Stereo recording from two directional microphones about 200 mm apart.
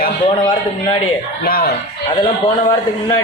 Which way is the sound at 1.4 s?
50° left (ahead or behind).